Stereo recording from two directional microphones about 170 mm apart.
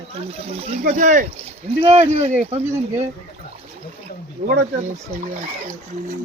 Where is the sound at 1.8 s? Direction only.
35° right (ahead or behind).